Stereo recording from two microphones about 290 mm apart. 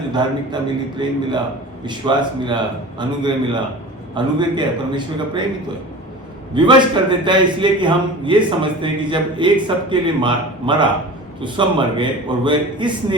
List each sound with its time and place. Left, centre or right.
0.1 s a man's voice: centre
6.5 s a man's voice: centre